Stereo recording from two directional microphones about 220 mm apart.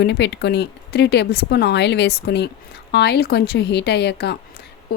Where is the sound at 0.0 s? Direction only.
50° left (ahead or behind).